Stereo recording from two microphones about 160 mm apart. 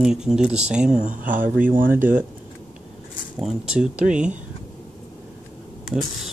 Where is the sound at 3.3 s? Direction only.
5° right (ahead or behind).